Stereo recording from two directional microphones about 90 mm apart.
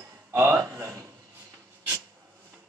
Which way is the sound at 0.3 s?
35° right (ahead or behind).